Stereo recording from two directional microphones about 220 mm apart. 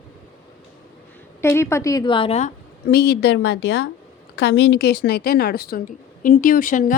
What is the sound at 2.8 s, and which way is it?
A woman's voice, 45° left (ahead or behind).